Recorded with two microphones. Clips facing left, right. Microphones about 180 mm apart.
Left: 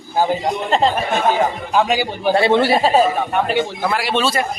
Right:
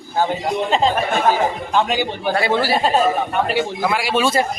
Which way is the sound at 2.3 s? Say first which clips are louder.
Left 5 dB; 25° left (ahead or behind).